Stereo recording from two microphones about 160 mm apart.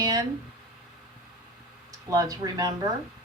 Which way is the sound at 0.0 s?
25° right (ahead or behind).